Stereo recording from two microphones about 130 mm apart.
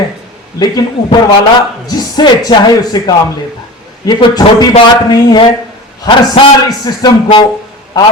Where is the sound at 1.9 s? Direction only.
30° left (ahead or behind).